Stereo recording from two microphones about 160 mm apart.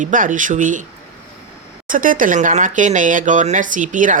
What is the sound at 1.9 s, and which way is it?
Speech, 55° right (ahead or behind).